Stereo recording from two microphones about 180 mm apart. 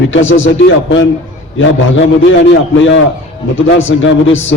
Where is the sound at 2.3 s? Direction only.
90° left.